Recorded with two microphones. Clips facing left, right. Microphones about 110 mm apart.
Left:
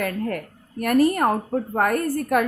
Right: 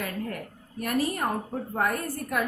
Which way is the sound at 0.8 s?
60° left (ahead or behind).